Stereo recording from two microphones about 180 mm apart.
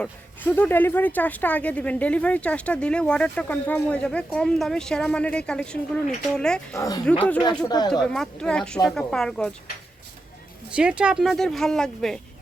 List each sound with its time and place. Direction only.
0.0 s speech: 10° left (ahead or behind)
6.7 s speech: 20° left (ahead or behind)
7.0 s speech: 5° left (ahead or behind)
7.7 s speech: 20° left (ahead or behind)
8.1 s speech: 5° left (ahead or behind)
10.8 s speech: 5° right (ahead or behind)